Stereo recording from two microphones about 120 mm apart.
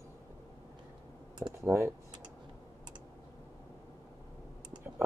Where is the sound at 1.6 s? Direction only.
25° right (ahead or behind).